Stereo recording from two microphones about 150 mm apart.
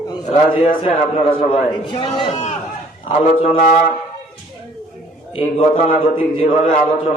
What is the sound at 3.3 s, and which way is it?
Speech, 40° left (ahead or behind).